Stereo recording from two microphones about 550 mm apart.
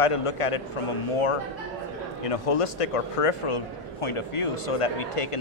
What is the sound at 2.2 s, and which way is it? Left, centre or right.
A man's voice, left.